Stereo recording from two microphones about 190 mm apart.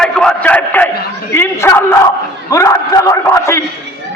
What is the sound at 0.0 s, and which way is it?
A man's voice, 5° left (ahead or behind).